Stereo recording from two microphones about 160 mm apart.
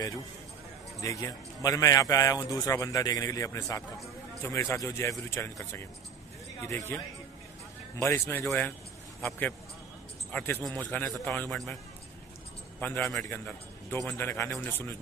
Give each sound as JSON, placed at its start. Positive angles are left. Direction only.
{"t": 1.0, "sound": "a man's voice", "side_deg": 20}
{"t": 8.0, "sound": "speech", "side_deg": 15}
{"t": 10.3, "sound": "speech", "side_deg": 10}
{"t": 12.8, "sound": "a man's voice", "side_deg": 15}